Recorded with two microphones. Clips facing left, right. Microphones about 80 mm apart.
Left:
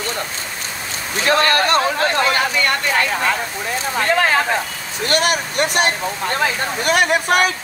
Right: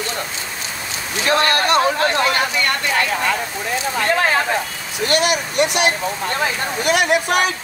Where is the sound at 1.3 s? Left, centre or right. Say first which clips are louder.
Left 1 dB; left.